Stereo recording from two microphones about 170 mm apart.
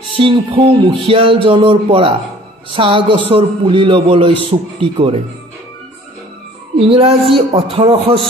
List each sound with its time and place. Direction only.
0.2 s speech: 30° right (ahead or behind)
6.9 s speech: 35° right (ahead or behind)